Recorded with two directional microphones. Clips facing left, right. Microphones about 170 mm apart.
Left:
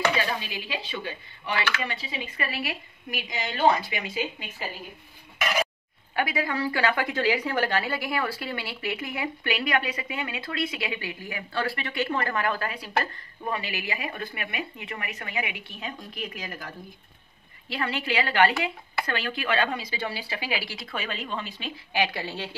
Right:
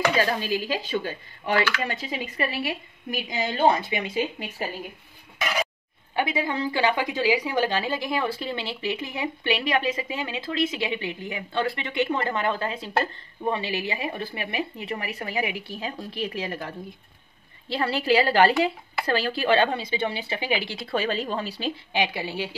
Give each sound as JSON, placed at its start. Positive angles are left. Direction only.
{"t": 0.1, "sound": "speech", "side_deg": -40}
{"t": 3.2, "sound": "speech", "side_deg": -35}
{"t": 6.1, "sound": "a woman's voice", "side_deg": -25}
{"t": 21.9, "sound": "a woman's voice", "side_deg": -15}